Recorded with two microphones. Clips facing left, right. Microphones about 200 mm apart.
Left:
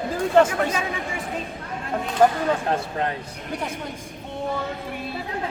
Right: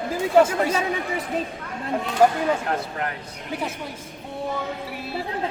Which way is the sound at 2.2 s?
10° right (ahead or behind).